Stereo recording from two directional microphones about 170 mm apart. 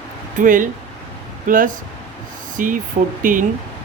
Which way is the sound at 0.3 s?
50° right (ahead or behind).